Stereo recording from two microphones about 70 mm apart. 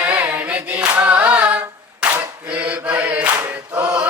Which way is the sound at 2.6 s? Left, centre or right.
Centre.